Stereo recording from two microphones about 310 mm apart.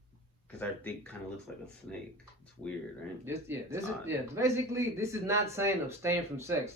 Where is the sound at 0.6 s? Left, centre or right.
Centre.